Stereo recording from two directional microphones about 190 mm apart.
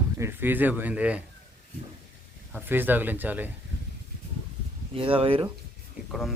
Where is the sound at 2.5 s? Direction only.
10° right (ahead or behind).